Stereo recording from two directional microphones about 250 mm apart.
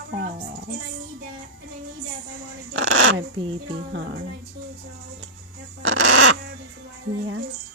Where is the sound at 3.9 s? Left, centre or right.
Right.